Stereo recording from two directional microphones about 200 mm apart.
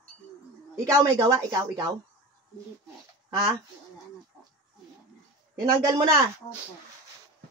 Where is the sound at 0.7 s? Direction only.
15° right (ahead or behind).